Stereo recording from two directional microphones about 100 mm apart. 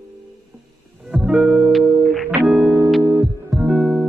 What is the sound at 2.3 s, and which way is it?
Music, 15° right (ahead or behind).